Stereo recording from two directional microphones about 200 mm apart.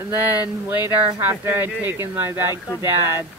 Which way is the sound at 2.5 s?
20° left (ahead or behind).